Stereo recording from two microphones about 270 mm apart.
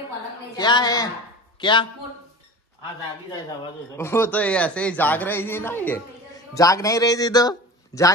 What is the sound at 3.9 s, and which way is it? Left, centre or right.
A man's voice, centre.